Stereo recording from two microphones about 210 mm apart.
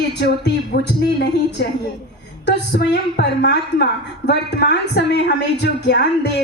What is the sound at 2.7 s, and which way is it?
A woman's voice, 55° left (ahead or behind).